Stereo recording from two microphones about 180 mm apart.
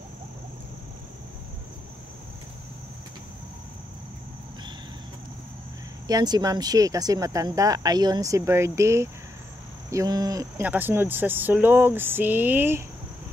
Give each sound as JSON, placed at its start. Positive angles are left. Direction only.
{"t": 6.0, "sound": "speech", "side_deg": -20}
{"t": 10.6, "sound": "speech", "side_deg": -10}